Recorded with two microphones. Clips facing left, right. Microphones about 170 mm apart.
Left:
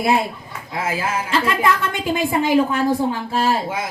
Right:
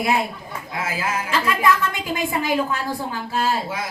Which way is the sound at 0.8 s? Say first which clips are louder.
Left 3 dB; 30° left (ahead or behind).